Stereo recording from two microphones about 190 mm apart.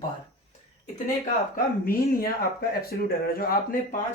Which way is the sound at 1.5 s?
50° left (ahead or behind).